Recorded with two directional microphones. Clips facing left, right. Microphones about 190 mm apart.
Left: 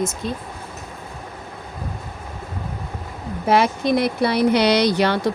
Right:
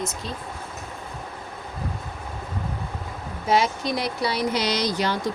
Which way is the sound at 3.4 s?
60° left (ahead or behind).